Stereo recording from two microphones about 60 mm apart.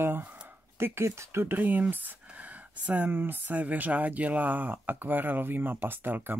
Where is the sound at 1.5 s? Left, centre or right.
Right.